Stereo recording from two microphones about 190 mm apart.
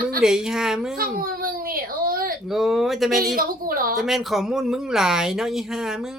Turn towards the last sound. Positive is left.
turn(degrees=0)  # may be behind; listen again after turning